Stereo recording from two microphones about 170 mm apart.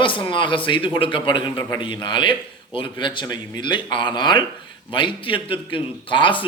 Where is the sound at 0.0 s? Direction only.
30° left (ahead or behind).